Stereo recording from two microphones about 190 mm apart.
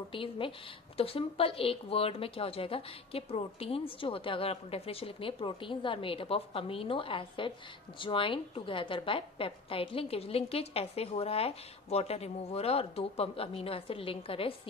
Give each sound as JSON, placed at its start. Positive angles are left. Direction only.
{"t": 0.1, "sound": "a woman's voice", "side_deg": 25}